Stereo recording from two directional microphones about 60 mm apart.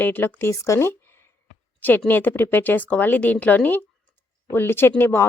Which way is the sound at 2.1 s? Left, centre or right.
Left.